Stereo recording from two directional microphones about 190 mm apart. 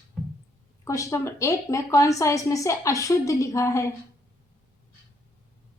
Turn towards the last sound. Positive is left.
turn(degrees=15)  # may be behind; listen again after turning